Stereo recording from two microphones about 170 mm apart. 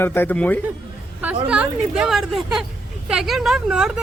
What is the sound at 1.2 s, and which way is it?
A woman's voice, 5° right (ahead or behind).